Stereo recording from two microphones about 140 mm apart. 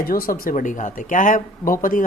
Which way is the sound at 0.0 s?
90° left.